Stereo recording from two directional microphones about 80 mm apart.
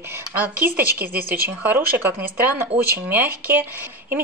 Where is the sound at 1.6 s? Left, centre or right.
Right.